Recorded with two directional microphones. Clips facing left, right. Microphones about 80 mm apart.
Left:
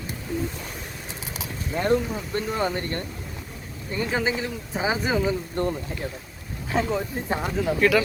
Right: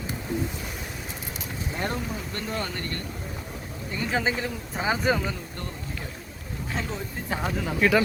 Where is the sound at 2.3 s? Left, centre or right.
Centre.